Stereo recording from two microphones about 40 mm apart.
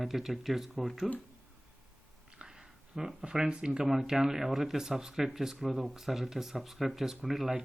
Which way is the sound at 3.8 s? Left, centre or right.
Centre.